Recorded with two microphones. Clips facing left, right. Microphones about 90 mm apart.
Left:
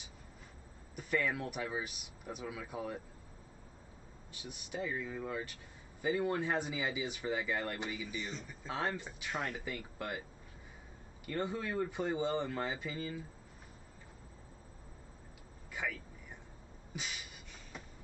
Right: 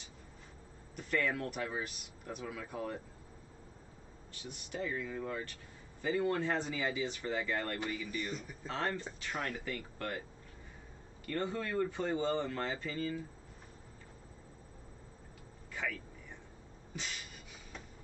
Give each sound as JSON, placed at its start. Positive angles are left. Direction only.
{"t": 0.9, "sound": "speech", "side_deg": 10}
{"t": 4.3, "sound": "speech", "side_deg": 10}
{"t": 11.2, "sound": "speech", "side_deg": 10}
{"t": 15.7, "sound": "a sound", "side_deg": 10}
{"t": 16.9, "sound": "speech", "side_deg": 15}